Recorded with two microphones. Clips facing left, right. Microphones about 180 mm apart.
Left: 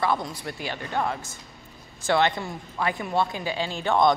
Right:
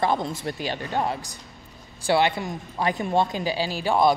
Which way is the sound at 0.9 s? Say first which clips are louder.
Right 1 dB; 15° right (ahead or behind).